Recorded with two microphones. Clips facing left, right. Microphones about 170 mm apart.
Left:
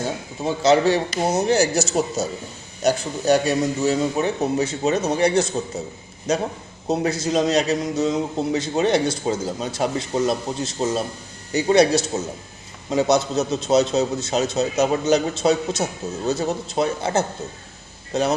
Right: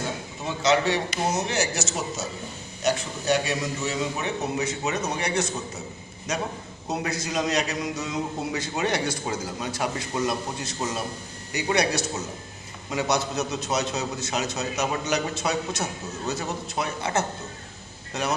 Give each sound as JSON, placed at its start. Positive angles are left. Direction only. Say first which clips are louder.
{"t": 0.4, "sound": "a man's voice", "louder": "left 6 dB", "side_deg": 35}